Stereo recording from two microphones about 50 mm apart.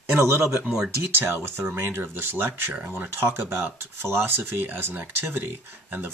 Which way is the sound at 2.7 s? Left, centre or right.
Right.